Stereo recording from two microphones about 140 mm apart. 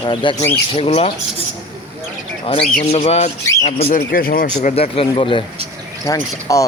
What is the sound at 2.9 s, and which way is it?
Speech, 50° left (ahead or behind).